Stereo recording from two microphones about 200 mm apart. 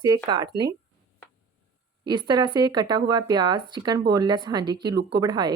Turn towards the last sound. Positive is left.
turn(degrees=-20)  # may be behind; listen again after turning